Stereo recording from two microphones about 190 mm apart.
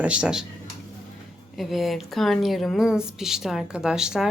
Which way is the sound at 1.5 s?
Centre (ahead or behind).